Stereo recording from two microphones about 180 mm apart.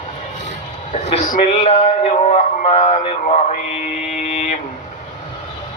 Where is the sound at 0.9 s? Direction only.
35° left (ahead or behind).